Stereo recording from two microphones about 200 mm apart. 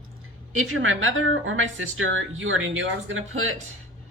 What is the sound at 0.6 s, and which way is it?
Speech, 85° right.